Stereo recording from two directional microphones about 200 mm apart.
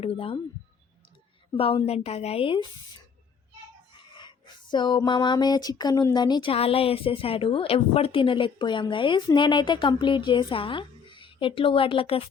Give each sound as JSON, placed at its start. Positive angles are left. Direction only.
{"t": 0.0, "sound": "speech", "side_deg": 30}
{"t": 1.5, "sound": "speech", "side_deg": 30}
{"t": 4.1, "sound": "speech", "side_deg": 25}